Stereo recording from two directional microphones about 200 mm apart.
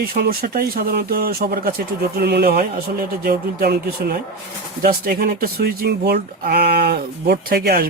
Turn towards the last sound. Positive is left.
turn(degrees=-50)  # may be behind; listen again after turning